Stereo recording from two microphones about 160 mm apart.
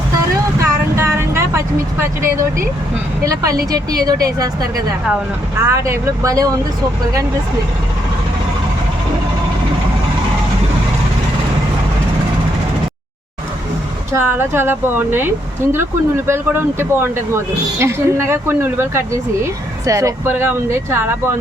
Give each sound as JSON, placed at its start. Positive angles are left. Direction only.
{"t": 0.6, "sound": "vehicle", "side_deg": -15}
{"t": 3.2, "sound": "speech", "side_deg": -20}
{"t": 14.1, "sound": "speech", "side_deg": -15}